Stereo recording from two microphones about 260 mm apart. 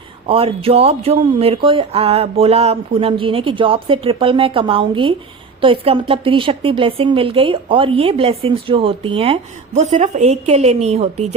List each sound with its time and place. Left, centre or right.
0.3 s speech: right